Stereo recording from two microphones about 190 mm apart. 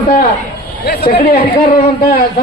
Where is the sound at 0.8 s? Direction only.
55° left (ahead or behind).